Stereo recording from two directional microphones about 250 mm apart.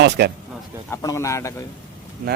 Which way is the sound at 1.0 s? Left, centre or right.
Centre.